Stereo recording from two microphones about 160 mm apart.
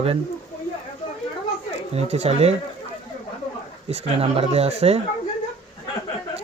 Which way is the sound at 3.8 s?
40° right (ahead or behind).